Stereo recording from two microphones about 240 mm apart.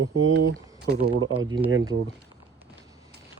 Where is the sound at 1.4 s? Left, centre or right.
Centre.